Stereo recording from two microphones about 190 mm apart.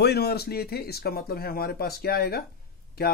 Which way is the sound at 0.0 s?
60° left (ahead or behind).